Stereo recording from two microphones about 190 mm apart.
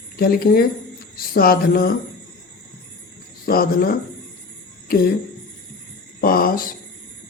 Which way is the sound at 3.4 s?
50° left (ahead or behind).